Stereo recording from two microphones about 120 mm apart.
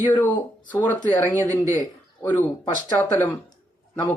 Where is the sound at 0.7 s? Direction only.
15° left (ahead or behind).